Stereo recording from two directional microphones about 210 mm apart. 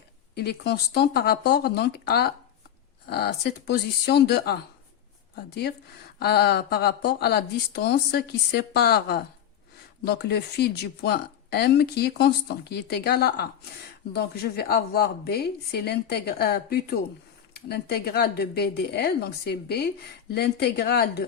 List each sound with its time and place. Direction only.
0.3 s speech: 50° left (ahead or behind)
6.1 s speech: 50° left (ahead or behind)